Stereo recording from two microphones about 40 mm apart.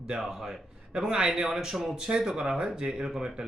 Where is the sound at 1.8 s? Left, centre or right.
Centre.